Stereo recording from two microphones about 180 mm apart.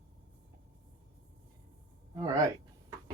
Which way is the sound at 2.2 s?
20° right (ahead or behind).